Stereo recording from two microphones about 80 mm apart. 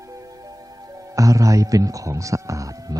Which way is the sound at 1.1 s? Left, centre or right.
Right.